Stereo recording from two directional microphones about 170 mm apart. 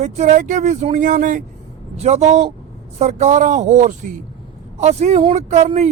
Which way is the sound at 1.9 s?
40° right (ahead or behind).